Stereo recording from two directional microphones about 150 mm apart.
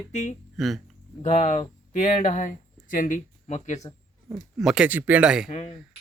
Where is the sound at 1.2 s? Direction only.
50° left (ahead or behind).